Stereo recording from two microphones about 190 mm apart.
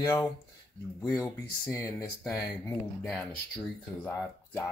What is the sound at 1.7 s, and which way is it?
Speech, 15° left (ahead or behind).